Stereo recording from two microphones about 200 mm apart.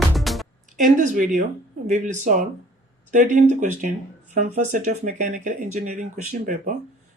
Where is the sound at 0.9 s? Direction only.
40° right (ahead or behind).